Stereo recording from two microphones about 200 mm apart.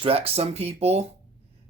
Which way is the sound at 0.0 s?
30° right (ahead or behind).